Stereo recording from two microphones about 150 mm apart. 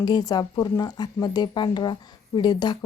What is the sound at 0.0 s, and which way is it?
Speech, 25° left (ahead or behind).